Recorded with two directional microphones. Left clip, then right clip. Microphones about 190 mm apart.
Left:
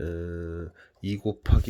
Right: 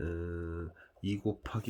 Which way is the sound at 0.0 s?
25° left (ahead or behind).